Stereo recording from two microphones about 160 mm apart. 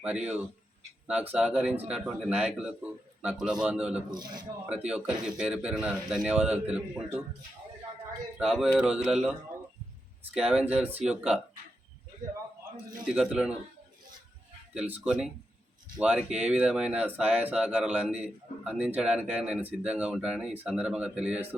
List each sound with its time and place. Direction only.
0.0 s a man's voice: 10° right (ahead or behind)
4.1 s a man's voice: 25° right (ahead or behind)
4.7 s speech: 5° right (ahead or behind)
8.4 s a man's voice: 5° right (ahead or behind)
10.3 s a man's voice: 5° right (ahead or behind)
13.1 s a man's voice: 5° right (ahead or behind)
14.7 s a man's voice: 10° right (ahead or behind)